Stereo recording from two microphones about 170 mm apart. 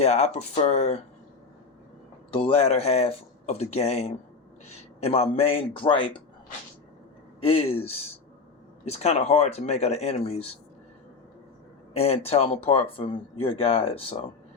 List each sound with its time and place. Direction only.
0.0 s speech: 40° left (ahead or behind)
2.3 s speech: 35° left (ahead or behind)
7.4 s speech: 35° left (ahead or behind)
8.8 s speech: 40° left (ahead or behind)
11.9 s speech: 35° left (ahead or behind)